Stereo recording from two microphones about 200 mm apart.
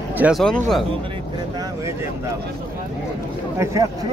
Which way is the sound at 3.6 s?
15° right (ahead or behind).